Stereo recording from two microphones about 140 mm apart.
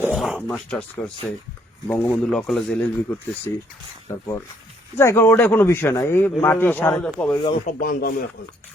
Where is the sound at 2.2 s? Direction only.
5° left (ahead or behind).